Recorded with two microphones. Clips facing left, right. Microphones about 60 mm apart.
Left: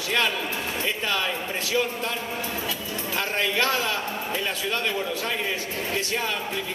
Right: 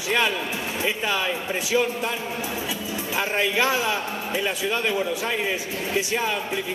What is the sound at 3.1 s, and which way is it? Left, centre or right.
Speech, centre.